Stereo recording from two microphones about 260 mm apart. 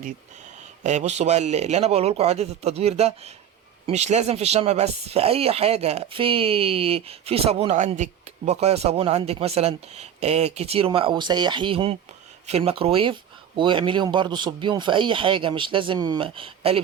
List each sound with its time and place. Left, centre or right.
0.9 s speech: right